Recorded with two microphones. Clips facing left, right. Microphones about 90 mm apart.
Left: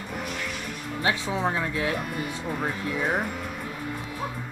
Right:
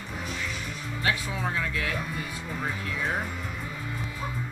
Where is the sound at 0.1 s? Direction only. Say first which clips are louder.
Left 2 dB; 60° left (ahead or behind).